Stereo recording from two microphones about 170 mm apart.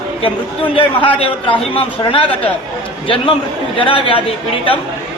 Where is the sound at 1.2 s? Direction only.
30° left (ahead or behind).